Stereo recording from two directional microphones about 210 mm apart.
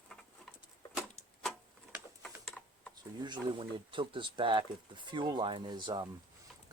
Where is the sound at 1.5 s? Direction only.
Centre (ahead or behind).